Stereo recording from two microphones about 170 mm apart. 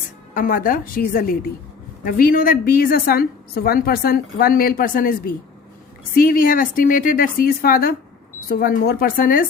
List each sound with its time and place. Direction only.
0.3 s a woman's voice: 55° left (ahead or behind)